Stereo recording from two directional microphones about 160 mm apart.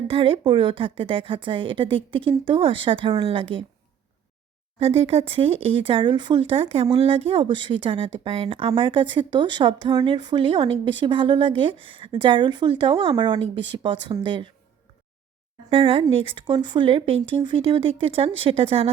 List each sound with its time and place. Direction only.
0.1 s speech: 35° right (ahead or behind)
4.8 s speech: 35° right (ahead or behind)
15.7 s speech: 35° right (ahead or behind)